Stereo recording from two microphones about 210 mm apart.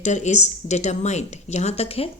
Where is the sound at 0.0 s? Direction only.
35° left (ahead or behind).